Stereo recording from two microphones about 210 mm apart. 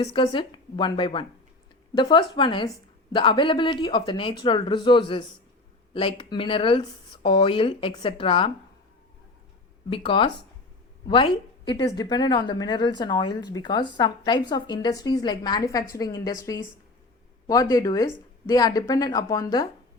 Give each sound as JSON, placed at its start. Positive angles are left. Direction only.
{"t": 0.0, "sound": "a woman's voice", "side_deg": 25}
{"t": 9.9, "sound": "a woman's voice", "side_deg": 25}
{"t": 17.4, "sound": "a woman's voice", "side_deg": 15}